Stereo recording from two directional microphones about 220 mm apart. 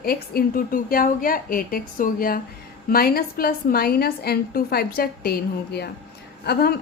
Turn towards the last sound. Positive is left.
turn(degrees=45)  # may be behind; listen again after turning